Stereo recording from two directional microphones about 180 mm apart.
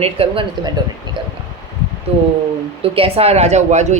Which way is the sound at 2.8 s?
30° right (ahead or behind).